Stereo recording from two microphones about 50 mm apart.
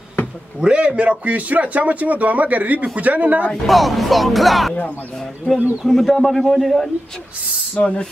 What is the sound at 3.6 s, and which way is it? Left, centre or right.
Speech, centre.